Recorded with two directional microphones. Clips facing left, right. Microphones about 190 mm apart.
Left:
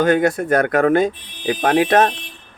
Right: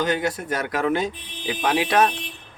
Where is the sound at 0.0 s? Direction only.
55° left (ahead or behind).